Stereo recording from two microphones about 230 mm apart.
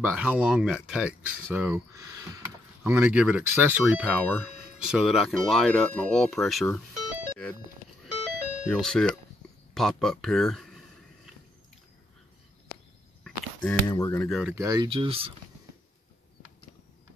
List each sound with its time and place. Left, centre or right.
0.0 s speech: centre
8.6 s speech: centre
13.2 s a sound: centre
13.8 s speech: centre
14.5 s speech: centre